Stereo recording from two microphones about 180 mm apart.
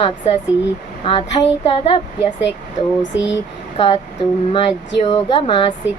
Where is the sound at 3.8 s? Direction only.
30° left (ahead or behind).